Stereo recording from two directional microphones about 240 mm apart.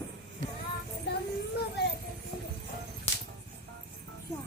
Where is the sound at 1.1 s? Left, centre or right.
Left.